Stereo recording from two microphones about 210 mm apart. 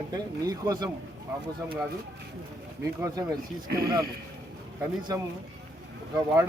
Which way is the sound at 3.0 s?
15° right (ahead or behind).